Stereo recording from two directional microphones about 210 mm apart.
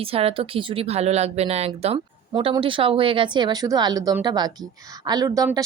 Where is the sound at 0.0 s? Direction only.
25° right (ahead or behind).